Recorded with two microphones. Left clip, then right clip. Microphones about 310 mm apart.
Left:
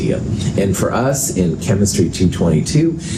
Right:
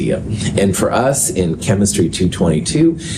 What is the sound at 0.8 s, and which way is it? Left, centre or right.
Speech, right.